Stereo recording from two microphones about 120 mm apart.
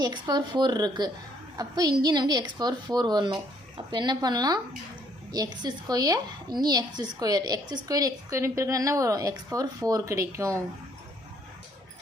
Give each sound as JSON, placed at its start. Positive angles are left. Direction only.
{"t": 0.0, "sound": "a woman's voice", "side_deg": -35}